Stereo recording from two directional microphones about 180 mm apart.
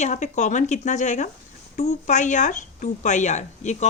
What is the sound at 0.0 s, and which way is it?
Speech, 40° left (ahead or behind).